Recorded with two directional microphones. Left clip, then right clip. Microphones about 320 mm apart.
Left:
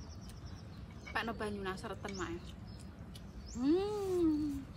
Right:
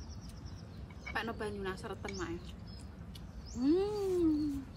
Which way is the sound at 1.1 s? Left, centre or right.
Centre.